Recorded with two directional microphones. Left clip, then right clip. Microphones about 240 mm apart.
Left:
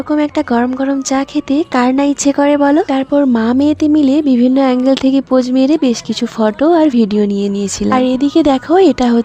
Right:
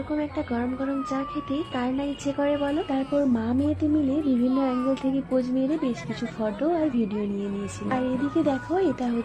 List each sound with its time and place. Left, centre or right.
0.2 s a woman's voice: left